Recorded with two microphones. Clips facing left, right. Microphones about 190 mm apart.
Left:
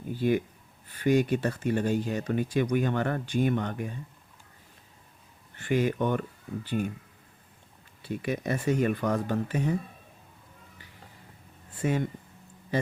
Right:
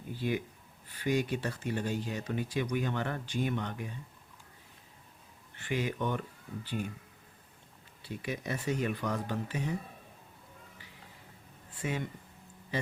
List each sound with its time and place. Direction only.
0.1 s speech: 50° left (ahead or behind)
5.5 s speech: 50° left (ahead or behind)
8.0 s speech: 55° left (ahead or behind)
11.8 s speech: 45° left (ahead or behind)